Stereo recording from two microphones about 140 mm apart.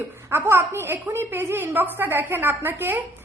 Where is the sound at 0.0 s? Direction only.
20° right (ahead or behind).